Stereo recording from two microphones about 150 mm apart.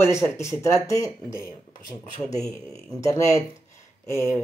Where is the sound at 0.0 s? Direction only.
20° left (ahead or behind).